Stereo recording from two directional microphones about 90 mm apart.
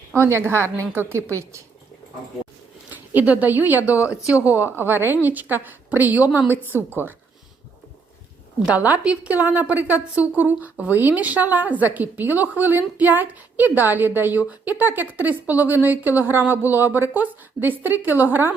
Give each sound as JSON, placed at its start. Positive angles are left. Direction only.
{"t": 0.2, "sound": "speech", "side_deg": -30}
{"t": 2.9, "sound": "speech", "side_deg": -20}
{"t": 8.6, "sound": "a woman's voice", "side_deg": -15}